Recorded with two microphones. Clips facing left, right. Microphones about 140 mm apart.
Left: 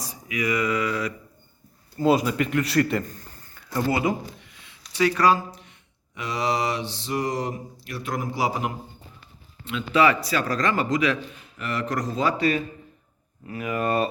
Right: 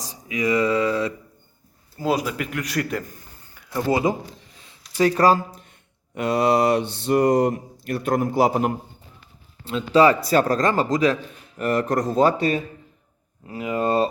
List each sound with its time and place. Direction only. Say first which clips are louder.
0.1 s speech: right 4 dB; 25° right (ahead or behind)
2.0 s speech: left 3 dB; centre (ahead or behind)
3.1 s a sound: left 2 dB; 15° right (ahead or behind)
3.8 s a sound: right 4 dB; 25° right (ahead or behind); by 5.7 s 40° right (ahead or behind)
6.1 s mantra: right 7 dB; 50° right (ahead or behind)
9.6 s a man's voice: right 4 dB; 35° right (ahead or behind)
12.0 s mantra: right 7 dB; 45° right (ahead or behind)
12.4 s speech: right 1 dB; 25° right (ahead or behind)